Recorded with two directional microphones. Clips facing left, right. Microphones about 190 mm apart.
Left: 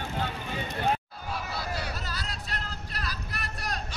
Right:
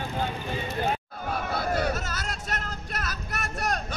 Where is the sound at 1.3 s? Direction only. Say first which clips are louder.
Right 6 dB; 50° right (ahead or behind).